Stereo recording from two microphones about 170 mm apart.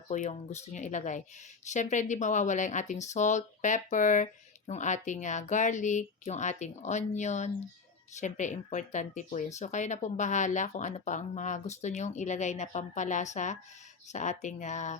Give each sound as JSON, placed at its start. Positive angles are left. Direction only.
{"t": 0.1, "sound": "speech", "side_deg": 45}